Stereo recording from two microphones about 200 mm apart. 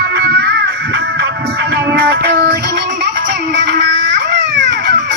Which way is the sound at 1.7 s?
55° right (ahead or behind).